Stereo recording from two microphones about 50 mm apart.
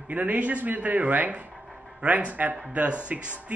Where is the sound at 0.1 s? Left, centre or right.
Right.